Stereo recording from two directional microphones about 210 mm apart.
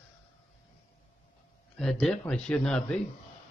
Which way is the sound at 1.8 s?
Centre (ahead or behind).